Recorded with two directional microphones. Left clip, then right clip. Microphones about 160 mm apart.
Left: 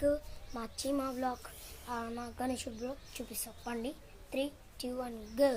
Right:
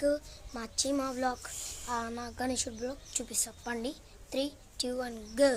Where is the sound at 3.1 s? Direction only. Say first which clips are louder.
Right 8 dB; 20° right (ahead or behind).